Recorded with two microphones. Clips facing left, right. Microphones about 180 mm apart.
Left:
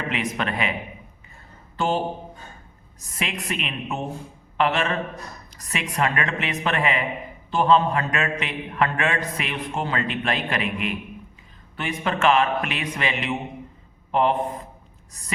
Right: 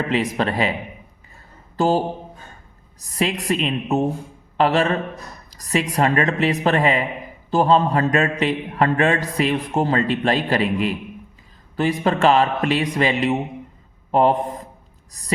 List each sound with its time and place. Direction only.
0.1 s a man's voice: 35° right (ahead or behind)
1.7 s a sound: 40° right (ahead or behind)
3.0 s a man's voice: 35° right (ahead or behind)